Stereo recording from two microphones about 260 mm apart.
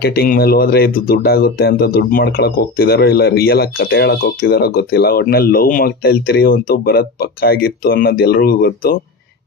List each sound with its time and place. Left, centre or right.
0.0 s speech: left